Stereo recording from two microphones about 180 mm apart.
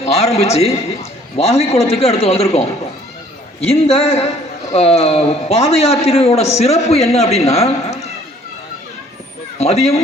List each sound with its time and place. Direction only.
0.0 s a man's voice: 35° left (ahead or behind)
3.7 s a man's voice: 35° left (ahead or behind)
9.6 s a man's voice: 35° left (ahead or behind)